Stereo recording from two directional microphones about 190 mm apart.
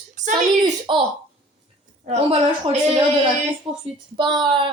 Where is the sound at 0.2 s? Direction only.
40° right (ahead or behind).